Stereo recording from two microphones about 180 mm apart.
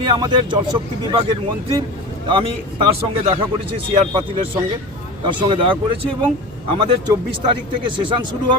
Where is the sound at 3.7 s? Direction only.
25° right (ahead or behind).